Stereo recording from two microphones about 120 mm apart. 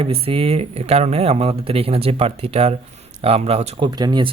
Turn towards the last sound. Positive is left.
turn(degrees=-40)  # may be behind; listen again after turning